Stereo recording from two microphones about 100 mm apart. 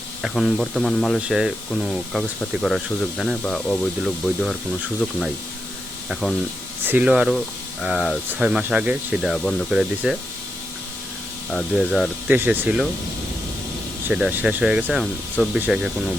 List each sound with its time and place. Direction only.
0.2 s speech: centre (ahead or behind)
6.8 s speech: 15° right (ahead or behind)
7.1 s speech: 5° right (ahead or behind)
9.2 s speech: 5° left (ahead or behind)
11.5 s speech: centre (ahead or behind)
12.3 s speech: 20° right (ahead or behind)
14.1 s speech: 10° right (ahead or behind)
14.9 s speech: 5° left (ahead or behind)
15.5 s speech: 10° right (ahead or behind)